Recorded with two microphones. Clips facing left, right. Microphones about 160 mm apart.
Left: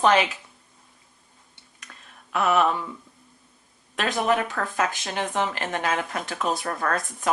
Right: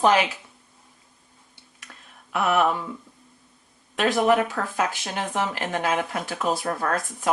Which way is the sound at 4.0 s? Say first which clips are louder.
Right 4 dB; 20° right (ahead or behind).